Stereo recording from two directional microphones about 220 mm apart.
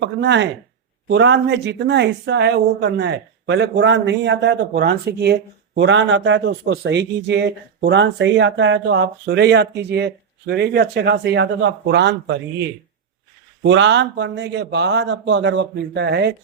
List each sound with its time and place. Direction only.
0.0 s speech: 50° right (ahead or behind)